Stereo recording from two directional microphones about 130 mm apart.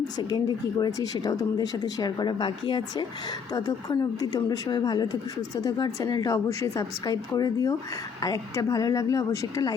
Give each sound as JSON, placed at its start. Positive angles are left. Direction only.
{"t": 0.2, "sound": "a woman's voice", "side_deg": 30}